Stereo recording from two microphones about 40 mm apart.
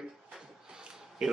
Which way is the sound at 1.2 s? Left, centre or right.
Centre.